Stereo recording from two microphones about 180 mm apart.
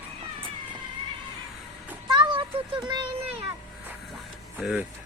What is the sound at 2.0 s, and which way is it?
Music, 25° right (ahead or behind).